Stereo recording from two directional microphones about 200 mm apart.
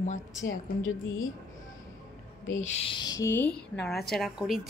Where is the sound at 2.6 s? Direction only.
30° left (ahead or behind).